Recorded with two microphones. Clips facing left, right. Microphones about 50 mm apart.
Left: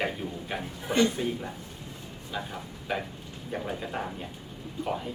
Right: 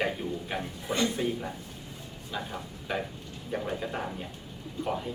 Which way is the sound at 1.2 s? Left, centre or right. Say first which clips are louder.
Even; centre.